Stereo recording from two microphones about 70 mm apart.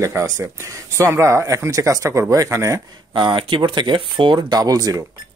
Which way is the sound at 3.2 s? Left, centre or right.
Right.